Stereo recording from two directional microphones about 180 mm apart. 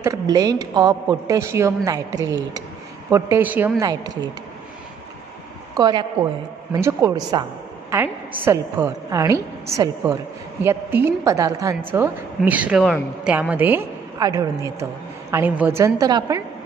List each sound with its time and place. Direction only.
0.0 s a woman's voice: 20° right (ahead or behind)
5.8 s a woman's voice: 25° right (ahead or behind)